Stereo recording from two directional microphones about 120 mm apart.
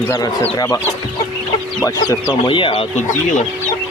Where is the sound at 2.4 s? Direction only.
45° left (ahead or behind).